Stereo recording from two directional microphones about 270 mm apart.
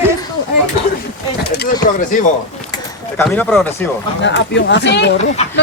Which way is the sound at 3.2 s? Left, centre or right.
Centre.